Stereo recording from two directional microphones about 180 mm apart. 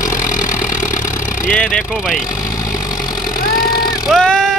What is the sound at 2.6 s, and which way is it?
Vehicle, 15° left (ahead or behind).